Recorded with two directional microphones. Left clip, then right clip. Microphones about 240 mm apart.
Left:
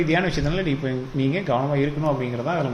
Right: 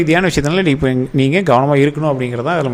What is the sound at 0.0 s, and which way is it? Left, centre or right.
A man's voice, right.